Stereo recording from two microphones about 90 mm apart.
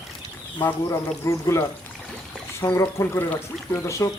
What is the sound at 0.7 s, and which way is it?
Speech, 35° left (ahead or behind).